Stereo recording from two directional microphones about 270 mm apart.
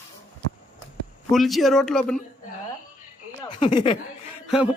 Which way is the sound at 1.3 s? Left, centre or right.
Centre.